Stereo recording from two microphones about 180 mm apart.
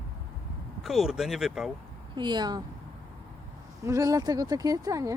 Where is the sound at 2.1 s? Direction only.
25° right (ahead or behind).